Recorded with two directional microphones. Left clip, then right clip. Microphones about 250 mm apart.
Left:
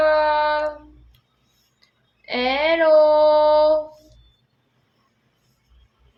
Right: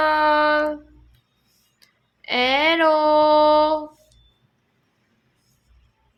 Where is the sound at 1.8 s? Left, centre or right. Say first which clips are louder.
Right 5 dB; right.